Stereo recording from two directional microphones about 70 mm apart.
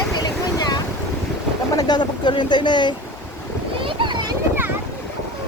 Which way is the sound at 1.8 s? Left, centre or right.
Left.